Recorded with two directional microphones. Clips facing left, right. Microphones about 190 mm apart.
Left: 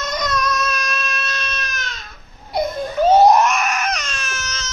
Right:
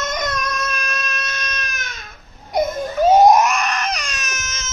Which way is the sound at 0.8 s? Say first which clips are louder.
Left 1 dB; 15° right (ahead or behind).